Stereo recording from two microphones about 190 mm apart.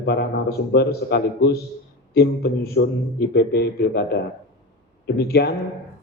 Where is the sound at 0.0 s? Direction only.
60° left (ahead or behind).